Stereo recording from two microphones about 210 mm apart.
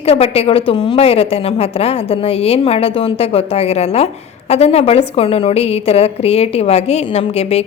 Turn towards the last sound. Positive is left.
turn(degrees=30)  # may be behind; listen again after turning